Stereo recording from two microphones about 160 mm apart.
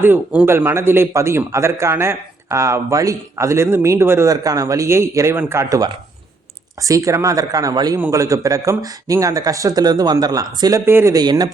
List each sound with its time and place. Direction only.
0.0 s a man's voice: 10° right (ahead or behind)